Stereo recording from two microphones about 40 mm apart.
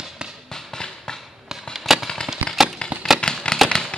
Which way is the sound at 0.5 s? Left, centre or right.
Centre.